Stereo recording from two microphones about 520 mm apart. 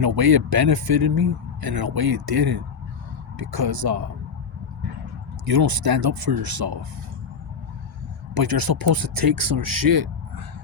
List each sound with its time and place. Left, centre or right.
0.0 s speech: right
5.5 s speech: right
8.4 s speech: right